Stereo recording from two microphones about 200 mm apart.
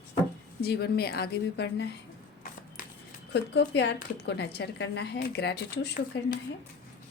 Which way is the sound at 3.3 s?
60° left (ahead or behind).